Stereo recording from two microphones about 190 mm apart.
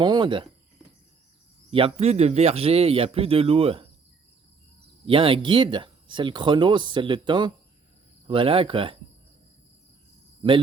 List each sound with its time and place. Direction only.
0.0 s speech: 25° right (ahead or behind)
1.7 s speech: 30° right (ahead or behind)
5.0 s speech: 30° right (ahead or behind)